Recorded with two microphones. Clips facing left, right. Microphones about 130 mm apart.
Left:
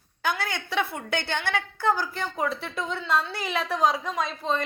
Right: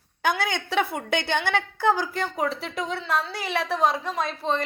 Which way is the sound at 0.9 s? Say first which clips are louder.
Right 4 dB; 15° right (ahead or behind).